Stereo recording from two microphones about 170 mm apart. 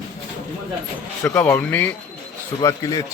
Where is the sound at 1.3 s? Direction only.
10° left (ahead or behind).